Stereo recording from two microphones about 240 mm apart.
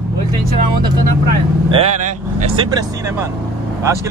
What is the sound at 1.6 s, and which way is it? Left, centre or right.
Speech, right.